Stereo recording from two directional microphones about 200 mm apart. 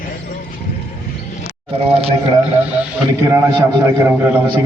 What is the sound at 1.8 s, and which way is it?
Speech, 30° right (ahead or behind).